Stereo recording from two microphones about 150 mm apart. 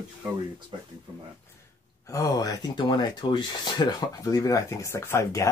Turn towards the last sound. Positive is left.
turn(degrees=20)  # may be behind; listen again after turning